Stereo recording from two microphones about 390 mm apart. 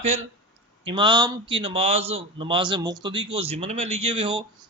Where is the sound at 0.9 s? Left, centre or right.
Centre.